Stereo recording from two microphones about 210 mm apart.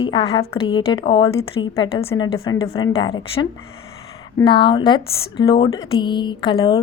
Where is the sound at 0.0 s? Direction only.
20° left (ahead or behind).